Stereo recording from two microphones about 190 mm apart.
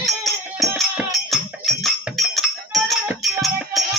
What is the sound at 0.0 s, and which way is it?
Music, centre (ahead or behind).